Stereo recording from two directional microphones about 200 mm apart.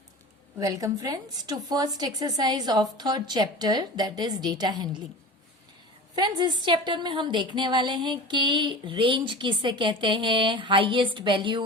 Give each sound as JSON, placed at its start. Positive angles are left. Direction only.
{"t": 0.6, "sound": "a woman's voice", "side_deg": -15}
{"t": 6.1, "sound": "a woman's voice", "side_deg": -25}